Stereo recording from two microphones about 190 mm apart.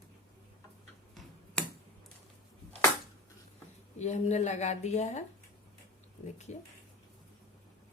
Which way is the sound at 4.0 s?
35° left (ahead or behind).